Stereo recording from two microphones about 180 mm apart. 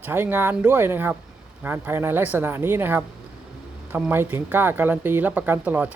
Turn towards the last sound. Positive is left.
turn(degrees=-10)  # may be behind; listen again after turning